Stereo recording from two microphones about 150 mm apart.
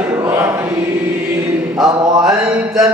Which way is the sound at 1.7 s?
5° right (ahead or behind).